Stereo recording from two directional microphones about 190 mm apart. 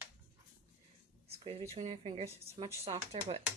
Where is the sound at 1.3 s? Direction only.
30° right (ahead or behind).